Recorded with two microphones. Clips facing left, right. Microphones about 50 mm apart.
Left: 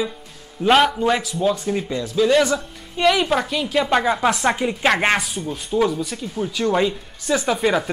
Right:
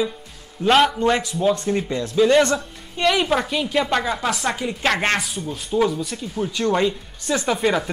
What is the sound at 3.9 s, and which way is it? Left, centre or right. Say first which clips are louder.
Speech: left 4 dB; centre.